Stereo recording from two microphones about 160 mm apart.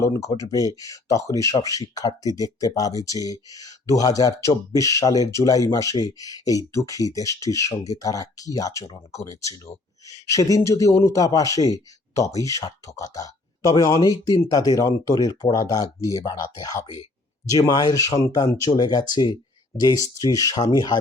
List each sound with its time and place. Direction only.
0.0 s speech: 20° left (ahead or behind)